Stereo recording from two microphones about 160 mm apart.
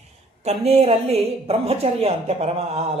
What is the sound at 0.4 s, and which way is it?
A woman's voice, 40° right (ahead or behind).